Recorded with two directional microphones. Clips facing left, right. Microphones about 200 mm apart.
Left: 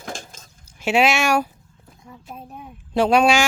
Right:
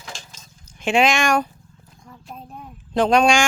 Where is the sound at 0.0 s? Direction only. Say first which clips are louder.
Left 6 dB; 50° left (ahead or behind).